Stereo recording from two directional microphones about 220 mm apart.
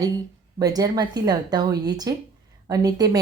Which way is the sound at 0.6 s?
15° right (ahead or behind).